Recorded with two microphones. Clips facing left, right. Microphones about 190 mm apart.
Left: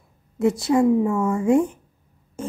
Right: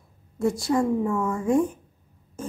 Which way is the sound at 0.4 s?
20° left (ahead or behind).